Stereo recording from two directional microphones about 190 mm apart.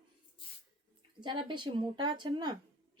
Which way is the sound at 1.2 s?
25° right (ahead or behind).